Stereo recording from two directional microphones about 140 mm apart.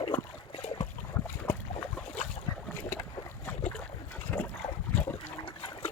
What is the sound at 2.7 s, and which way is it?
Boat, 70° left (ahead or behind).